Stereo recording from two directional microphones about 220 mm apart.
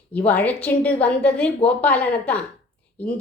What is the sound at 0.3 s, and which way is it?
A woman's voice, 5° left (ahead or behind).